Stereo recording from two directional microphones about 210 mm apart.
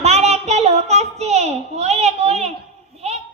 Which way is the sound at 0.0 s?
30° right (ahead or behind).